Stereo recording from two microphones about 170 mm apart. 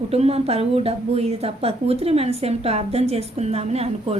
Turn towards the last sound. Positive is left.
turn(degrees=-35)  # may be behind; listen again after turning